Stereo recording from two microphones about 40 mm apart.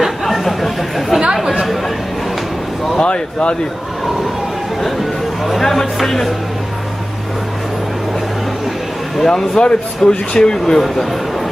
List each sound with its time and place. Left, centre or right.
0.0 s chatter: centre
3.0 s speech: left
5.5 s speech: centre
9.3 s speech: centre